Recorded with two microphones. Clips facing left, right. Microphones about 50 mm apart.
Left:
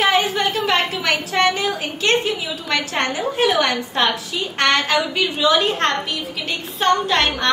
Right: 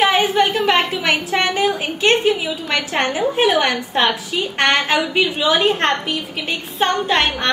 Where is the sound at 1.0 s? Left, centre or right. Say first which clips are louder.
Even; right.